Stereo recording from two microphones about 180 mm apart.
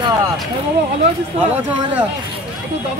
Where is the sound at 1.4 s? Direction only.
10° right (ahead or behind).